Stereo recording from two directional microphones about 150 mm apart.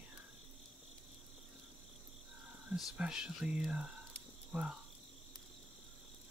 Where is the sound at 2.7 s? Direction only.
5° right (ahead or behind).